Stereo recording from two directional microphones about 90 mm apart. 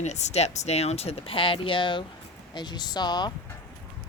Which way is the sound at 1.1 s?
85° left.